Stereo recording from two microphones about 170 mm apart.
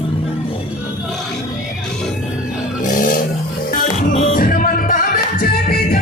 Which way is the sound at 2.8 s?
50° left (ahead or behind).